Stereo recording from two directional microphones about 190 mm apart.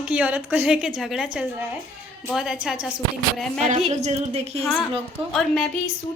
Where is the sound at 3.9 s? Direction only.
35° right (ahead or behind).